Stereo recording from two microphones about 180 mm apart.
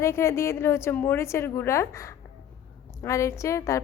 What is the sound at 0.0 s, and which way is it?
A woman's voice, 15° left (ahead or behind).